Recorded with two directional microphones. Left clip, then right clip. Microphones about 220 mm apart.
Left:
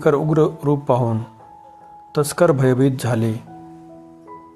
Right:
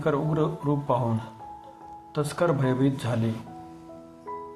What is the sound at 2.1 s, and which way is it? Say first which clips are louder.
Speech: left 9 dB; 55° left (ahead or behind).